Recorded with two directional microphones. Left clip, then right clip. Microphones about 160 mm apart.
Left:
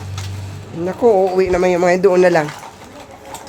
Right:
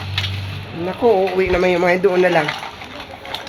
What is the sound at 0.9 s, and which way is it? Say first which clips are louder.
Speech: left 2 dB; 30° left (ahead or behind).